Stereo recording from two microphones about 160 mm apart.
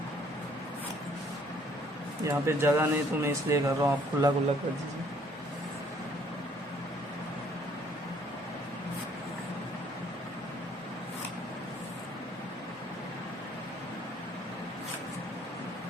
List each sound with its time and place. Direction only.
2.2 s speech: 15° right (ahead or behind)